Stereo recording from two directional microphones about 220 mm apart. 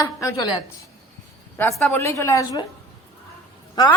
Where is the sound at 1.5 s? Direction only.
5° left (ahead or behind).